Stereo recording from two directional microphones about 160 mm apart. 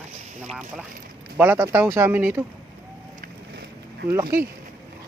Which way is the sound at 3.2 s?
90° right.